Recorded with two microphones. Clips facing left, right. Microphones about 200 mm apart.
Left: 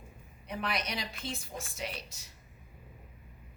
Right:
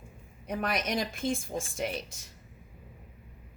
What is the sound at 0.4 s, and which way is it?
A woman's voice, 45° right (ahead or behind).